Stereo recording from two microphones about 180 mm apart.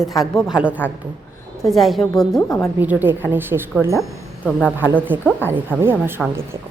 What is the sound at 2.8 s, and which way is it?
Speech, 10° right (ahead or behind).